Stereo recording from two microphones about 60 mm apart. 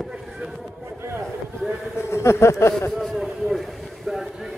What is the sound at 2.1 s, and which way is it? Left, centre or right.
Speech, left.